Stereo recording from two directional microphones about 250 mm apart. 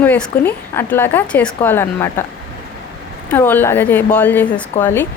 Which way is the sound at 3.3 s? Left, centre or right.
Centre.